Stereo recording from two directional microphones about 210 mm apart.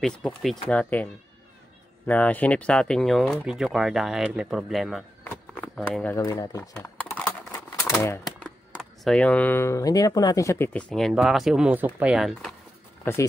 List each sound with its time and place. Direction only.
0.0 s speech: centre (ahead or behind)
5.2 s a sound: 10° left (ahead or behind)
6.1 s speech: 15° left (ahead or behind)
6.7 s a sound: 5° left (ahead or behind)
7.9 s speech: 15° left (ahead or behind)
13.0 s speech: 15° left (ahead or behind)